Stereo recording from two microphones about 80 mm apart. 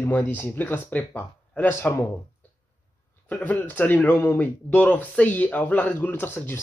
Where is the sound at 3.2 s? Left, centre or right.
Centre.